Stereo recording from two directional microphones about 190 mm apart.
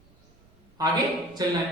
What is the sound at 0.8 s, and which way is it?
Speech, 20° right (ahead or behind).